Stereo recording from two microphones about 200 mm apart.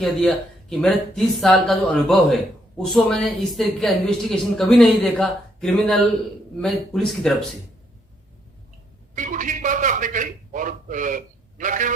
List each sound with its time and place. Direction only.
0.0 s a woman's voice: 5° left (ahead or behind)
9.1 s a man's voice: 40° right (ahead or behind)